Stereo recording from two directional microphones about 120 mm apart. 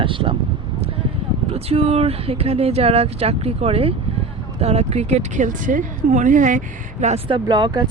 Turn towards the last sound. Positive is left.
turn(degrees=-40)  # may be behind; listen again after turning